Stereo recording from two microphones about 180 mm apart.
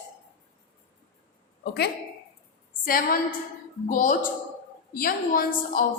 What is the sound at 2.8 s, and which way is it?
A woman's voice, 55° left (ahead or behind).